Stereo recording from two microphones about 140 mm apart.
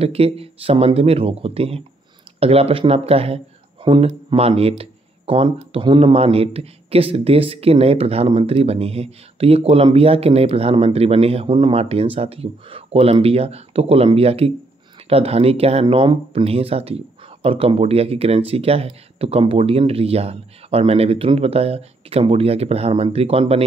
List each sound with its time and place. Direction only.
0.0 s speech: 45° right (ahead or behind)